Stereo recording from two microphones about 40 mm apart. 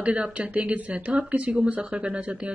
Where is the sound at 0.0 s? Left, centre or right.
Right.